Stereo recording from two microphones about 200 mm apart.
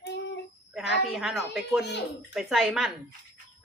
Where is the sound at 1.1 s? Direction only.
Centre (ahead or behind).